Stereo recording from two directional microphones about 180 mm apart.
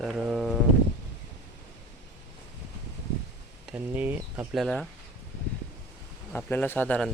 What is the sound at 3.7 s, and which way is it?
Speech, 10° right (ahead or behind).